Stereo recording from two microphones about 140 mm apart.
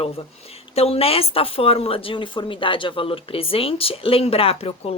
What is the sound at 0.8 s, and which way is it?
A woman's voice, 45° left (ahead or behind).